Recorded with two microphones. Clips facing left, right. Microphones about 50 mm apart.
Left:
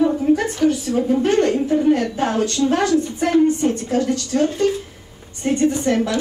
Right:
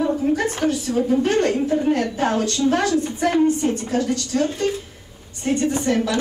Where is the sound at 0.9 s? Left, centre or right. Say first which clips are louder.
Left 2 dB; centre.